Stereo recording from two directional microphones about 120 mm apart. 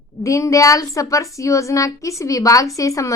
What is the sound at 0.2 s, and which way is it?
A woman's voice, 25° left (ahead or behind).